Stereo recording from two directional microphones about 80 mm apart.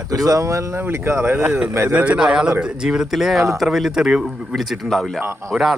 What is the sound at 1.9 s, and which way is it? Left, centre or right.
Speech, centre.